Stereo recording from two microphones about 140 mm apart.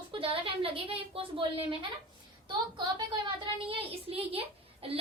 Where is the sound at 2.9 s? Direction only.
40° right (ahead or behind).